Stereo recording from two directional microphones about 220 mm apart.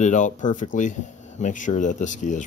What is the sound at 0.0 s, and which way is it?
Speech, 35° left (ahead or behind).